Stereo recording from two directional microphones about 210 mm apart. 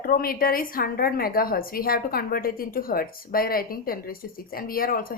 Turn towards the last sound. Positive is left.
turn(degrees=45)  # may be behind; listen again after turning